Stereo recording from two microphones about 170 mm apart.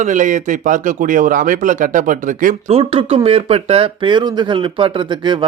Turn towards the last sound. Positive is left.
turn(degrees=-25)  # may be behind; listen again after turning